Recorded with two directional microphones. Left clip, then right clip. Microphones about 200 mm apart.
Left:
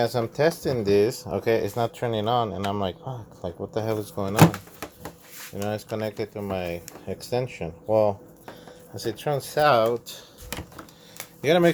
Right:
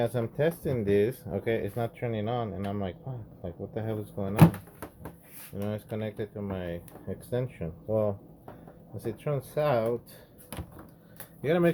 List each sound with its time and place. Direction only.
0.0 s speech: 10° left (ahead or behind)
5.5 s speech: 15° left (ahead or behind)
11.4 s speech: 30° left (ahead or behind)